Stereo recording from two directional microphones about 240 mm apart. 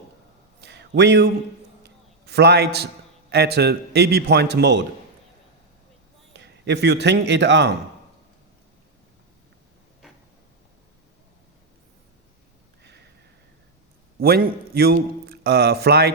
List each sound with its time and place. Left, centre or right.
0.6 s a sound: right
1.8 s a man's voice: right
6.3 s a man's voice: right
14.2 s a man's voice: right